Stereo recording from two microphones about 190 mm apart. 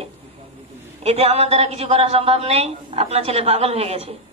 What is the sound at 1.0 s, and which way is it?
A man's voice, 35° right (ahead or behind).